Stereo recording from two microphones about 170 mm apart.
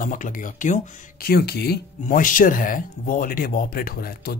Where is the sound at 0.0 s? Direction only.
50° left (ahead or behind).